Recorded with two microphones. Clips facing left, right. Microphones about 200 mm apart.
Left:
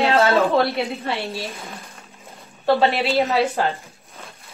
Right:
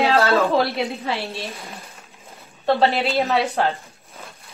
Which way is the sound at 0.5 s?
Centre (ahead or behind).